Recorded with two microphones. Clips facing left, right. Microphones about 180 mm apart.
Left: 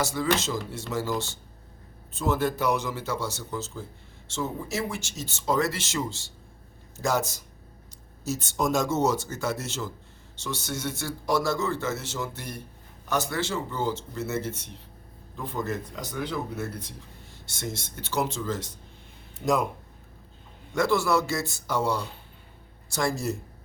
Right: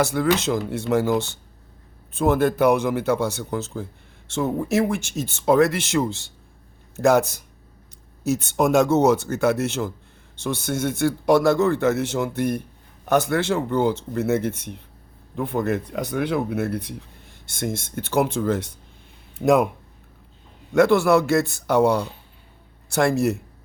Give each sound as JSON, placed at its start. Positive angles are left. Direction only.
{"t": 0.0, "sound": "speech", "side_deg": -60}
{"t": 20.7, "sound": "speech", "side_deg": -60}